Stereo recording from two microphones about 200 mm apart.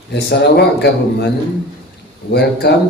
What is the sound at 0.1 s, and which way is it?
A man's voice, 55° left (ahead or behind).